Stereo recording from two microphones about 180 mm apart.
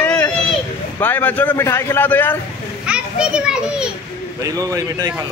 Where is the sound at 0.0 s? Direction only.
10° left (ahead or behind).